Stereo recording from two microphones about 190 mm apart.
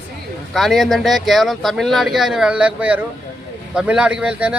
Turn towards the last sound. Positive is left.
turn(degrees=-5)  # may be behind; listen again after turning